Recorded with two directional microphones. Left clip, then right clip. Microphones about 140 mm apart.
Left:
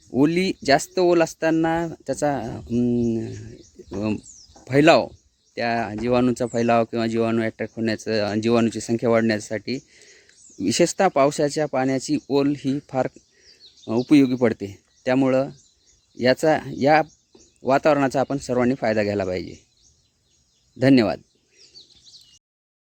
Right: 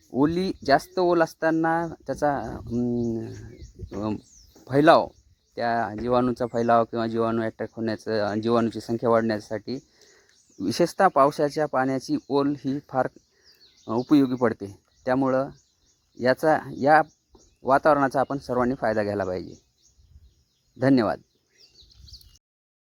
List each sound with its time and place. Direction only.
0.2 s speech: 30° left (ahead or behind)
20.7 s speech: 30° left (ahead or behind)